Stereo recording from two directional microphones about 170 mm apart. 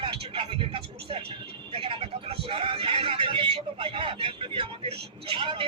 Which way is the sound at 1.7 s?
35° right (ahead or behind).